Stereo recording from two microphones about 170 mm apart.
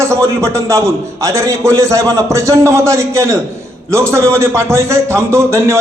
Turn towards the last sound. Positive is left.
turn(degrees=-15)  # may be behind; listen again after turning